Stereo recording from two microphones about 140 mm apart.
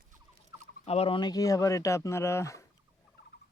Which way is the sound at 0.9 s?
45° left (ahead or behind).